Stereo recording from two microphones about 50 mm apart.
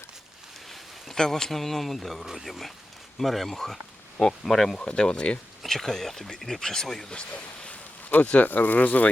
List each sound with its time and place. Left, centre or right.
0.7 s speech: centre
4.8 s speech: centre
5.6 s speech: centre
7.1 s speech: left